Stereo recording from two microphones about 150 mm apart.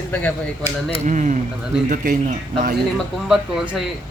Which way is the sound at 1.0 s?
55° right (ahead or behind).